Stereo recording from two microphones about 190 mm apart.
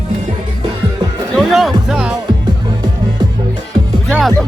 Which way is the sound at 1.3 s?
Centre (ahead or behind).